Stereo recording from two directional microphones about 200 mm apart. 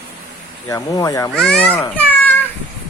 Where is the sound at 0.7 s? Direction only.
15° left (ahead or behind).